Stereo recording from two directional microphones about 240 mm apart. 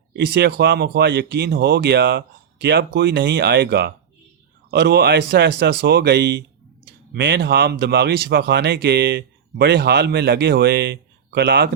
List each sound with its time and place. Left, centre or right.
0.2 s speech: right